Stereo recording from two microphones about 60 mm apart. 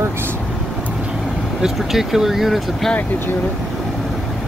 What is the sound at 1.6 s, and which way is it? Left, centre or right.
Speech, centre.